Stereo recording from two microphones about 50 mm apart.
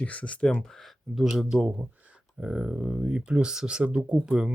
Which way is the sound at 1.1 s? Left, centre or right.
Centre.